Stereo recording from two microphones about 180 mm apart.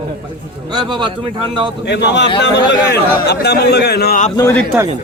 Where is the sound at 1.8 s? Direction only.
70° left (ahead or behind).